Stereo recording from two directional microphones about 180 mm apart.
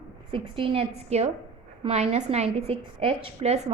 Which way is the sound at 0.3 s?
30° right (ahead or behind).